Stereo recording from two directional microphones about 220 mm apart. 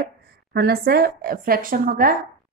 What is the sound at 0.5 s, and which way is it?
A woman's voice, 45° right (ahead or behind).